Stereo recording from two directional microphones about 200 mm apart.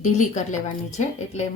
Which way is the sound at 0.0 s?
35° left (ahead or behind).